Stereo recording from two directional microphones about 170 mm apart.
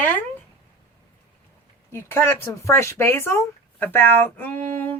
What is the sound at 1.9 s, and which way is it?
Speech, 15° left (ahead or behind).